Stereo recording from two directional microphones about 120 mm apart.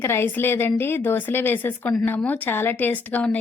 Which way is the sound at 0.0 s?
20° left (ahead or behind).